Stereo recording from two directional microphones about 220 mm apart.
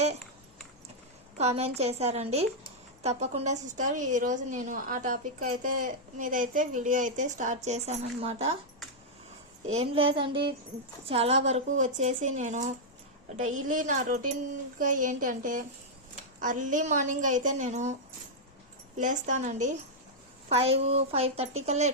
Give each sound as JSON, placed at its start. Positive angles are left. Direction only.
{"t": 1.4, "sound": "a woman's voice", "side_deg": -30}
{"t": 9.7, "sound": "a woman's voice", "side_deg": -25}
{"t": 18.9, "sound": "a woman's voice", "side_deg": -35}